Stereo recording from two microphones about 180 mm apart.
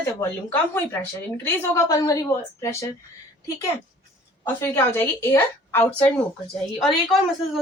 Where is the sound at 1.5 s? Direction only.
15° left (ahead or behind).